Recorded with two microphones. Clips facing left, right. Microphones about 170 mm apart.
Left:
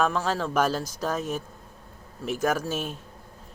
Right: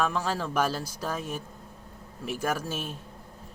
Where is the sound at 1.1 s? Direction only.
45° left (ahead or behind).